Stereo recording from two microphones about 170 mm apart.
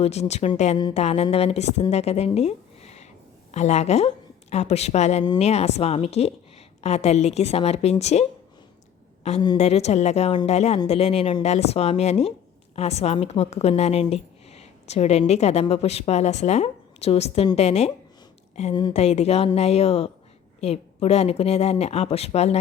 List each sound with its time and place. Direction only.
0.0 s a woman's voice: 40° left (ahead or behind)
18.7 s speech: 25° left (ahead or behind)
18.9 s a woman's voice: 40° left (ahead or behind)